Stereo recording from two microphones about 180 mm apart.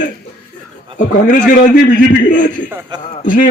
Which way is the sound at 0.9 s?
50° left (ahead or behind).